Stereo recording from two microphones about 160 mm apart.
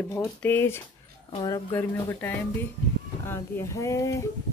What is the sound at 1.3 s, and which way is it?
Speech, 25° left (ahead or behind).